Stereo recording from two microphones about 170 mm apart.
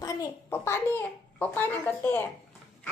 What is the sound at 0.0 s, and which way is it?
A child's voice, 20° left (ahead or behind).